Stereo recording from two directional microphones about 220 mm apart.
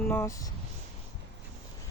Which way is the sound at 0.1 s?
10° left (ahead or behind).